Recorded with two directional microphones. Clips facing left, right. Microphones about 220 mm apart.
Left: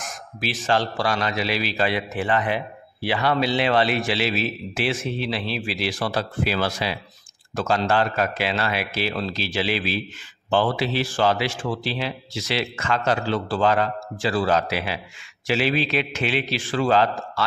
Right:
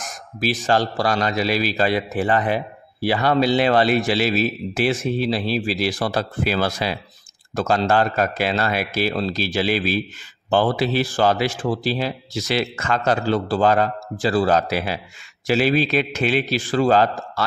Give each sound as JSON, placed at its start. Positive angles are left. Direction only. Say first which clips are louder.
{"t": 0.4, "sound": "a man's voice", "louder": "right 3 dB", "side_deg": -40}